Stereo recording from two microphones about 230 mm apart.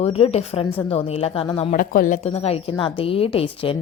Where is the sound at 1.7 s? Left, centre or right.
Left.